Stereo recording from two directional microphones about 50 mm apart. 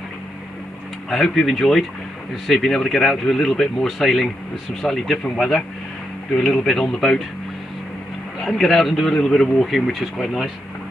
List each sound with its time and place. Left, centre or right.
1.1 s a man's voice: centre
8.5 s a man's voice: centre